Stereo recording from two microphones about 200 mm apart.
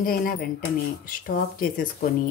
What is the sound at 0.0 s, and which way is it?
Speech, 50° left (ahead or behind).